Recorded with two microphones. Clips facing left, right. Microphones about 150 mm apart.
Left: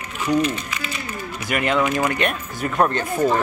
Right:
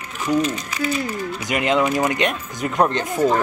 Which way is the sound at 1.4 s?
20° right (ahead or behind).